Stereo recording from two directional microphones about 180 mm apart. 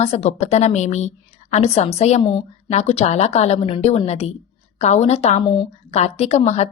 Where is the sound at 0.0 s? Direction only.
35° left (ahead or behind).